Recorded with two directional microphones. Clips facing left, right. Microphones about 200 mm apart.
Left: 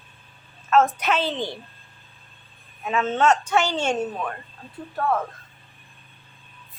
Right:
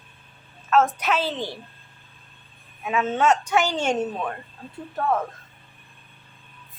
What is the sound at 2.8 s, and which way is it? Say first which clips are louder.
A woman's voice: left 1 dB; 10° right (ahead or behind).